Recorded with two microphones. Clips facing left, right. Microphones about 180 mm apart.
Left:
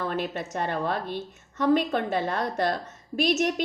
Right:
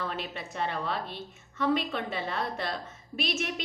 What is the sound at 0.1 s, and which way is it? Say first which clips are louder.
A woman's voice: left 7 dB; 45° left (ahead or behind).